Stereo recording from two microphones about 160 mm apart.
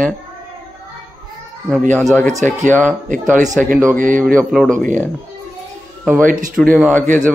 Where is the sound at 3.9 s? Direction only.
55° right (ahead or behind).